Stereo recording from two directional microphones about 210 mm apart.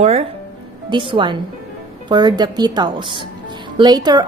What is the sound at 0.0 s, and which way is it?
A woman's voice, 30° right (ahead or behind).